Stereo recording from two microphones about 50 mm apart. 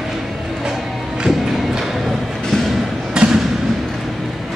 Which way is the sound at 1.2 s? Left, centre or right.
Centre.